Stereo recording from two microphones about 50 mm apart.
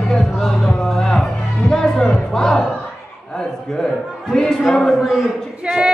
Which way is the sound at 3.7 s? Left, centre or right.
Centre.